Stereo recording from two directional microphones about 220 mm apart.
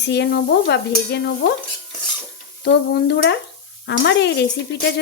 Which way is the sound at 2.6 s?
50° left (ahead or behind).